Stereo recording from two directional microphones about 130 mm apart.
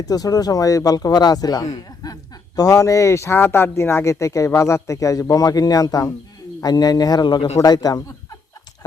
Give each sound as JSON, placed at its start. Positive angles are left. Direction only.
{"t": 0.0, "sound": "speech", "side_deg": 30}
{"t": 2.0, "sound": "chuckle", "side_deg": 30}
{"t": 2.6, "sound": "speech", "side_deg": 25}